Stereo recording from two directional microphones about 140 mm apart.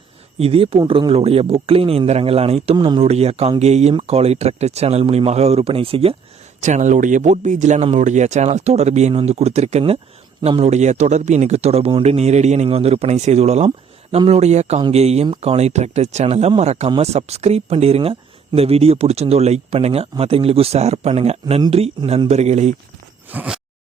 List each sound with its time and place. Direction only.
0.3 s speech: 45° right (ahead or behind)
2.7 s speech: 30° right (ahead or behind)
3.0 s speech: 50° right (ahead or behind)
6.6 s speech: 60° right (ahead or behind)
23.3 s a sound: 10° right (ahead or behind)